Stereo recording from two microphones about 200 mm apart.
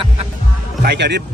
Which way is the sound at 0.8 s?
60° right (ahead or behind).